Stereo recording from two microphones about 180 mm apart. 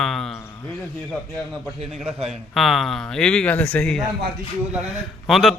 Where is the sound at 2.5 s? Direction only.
Centre (ahead or behind).